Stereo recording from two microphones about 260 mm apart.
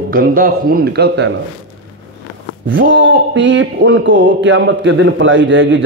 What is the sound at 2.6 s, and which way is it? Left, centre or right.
Speech, right.